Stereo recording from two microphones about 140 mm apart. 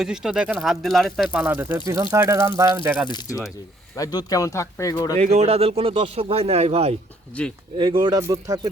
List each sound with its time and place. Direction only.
0.0 s speech: 5° right (ahead or behind)
1.3 s speech: 10° right (ahead or behind)
3.1 s speech: 30° left (ahead or behind)
5.1 s speech: 50° right (ahead or behind)
7.4 s speech: 10° left (ahead or behind)
7.8 s speech: 35° right (ahead or behind)